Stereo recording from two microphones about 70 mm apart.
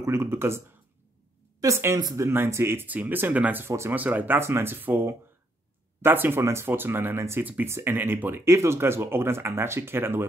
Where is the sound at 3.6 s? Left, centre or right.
Right.